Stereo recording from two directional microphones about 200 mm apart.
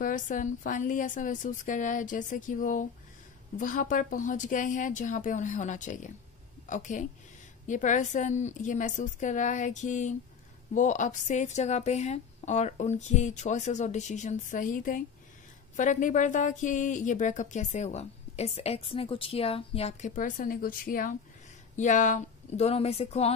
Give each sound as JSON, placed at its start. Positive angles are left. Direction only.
{"t": 0.0, "sound": "speech", "side_deg": 40}